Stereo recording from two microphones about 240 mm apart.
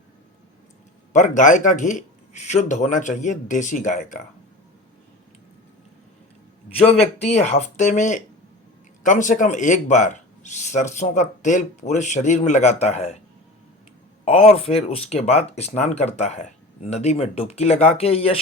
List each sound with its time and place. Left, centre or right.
1.1 s speech: left
6.8 s speech: left
14.3 s speech: left